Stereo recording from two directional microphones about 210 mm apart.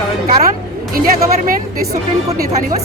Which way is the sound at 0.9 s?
40° right (ahead or behind).